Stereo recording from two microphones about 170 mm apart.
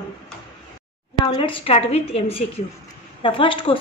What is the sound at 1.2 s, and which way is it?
A woman's voice, 25° left (ahead or behind).